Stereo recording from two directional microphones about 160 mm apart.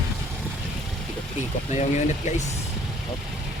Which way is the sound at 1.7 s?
45° left (ahead or behind).